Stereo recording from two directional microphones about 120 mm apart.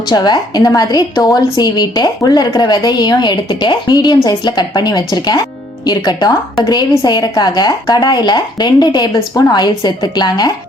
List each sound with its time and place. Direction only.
0.1 s a woman's voice: 35° left (ahead or behind)